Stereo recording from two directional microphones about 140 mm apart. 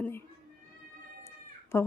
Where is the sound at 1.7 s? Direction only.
15° left (ahead or behind).